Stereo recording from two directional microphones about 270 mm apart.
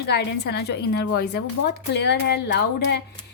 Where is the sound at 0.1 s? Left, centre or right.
Left.